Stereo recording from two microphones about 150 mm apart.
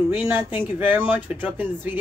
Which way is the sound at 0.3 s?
15° right (ahead or behind).